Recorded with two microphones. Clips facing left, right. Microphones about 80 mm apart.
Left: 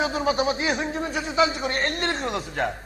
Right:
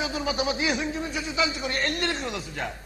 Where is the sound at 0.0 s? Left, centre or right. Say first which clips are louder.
Left 5 dB; left.